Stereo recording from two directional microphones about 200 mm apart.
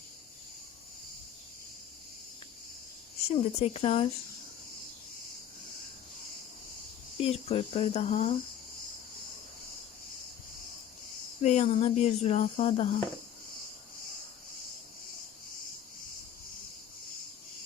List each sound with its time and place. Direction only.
3.2 s speech: 30° left (ahead or behind)
7.2 s speech: 30° left (ahead or behind)
11.4 s speech: 30° left (ahead or behind)